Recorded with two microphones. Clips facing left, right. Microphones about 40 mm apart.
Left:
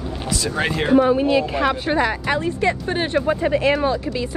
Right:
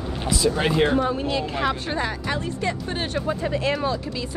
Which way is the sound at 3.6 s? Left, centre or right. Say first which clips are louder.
Left 4 dB; left.